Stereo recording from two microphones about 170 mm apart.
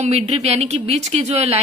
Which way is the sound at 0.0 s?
40° right (ahead or behind).